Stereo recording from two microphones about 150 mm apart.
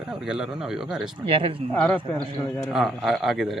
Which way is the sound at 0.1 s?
5° right (ahead or behind).